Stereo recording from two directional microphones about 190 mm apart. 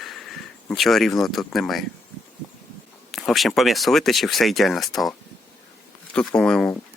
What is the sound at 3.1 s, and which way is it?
Speech, centre (ahead or behind).